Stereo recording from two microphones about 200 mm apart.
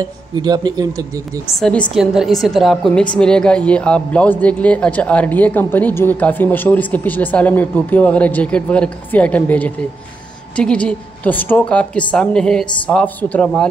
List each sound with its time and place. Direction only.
0.0 s speech: 20° right (ahead or behind)
1.6 s a woman's voice: 5° left (ahead or behind)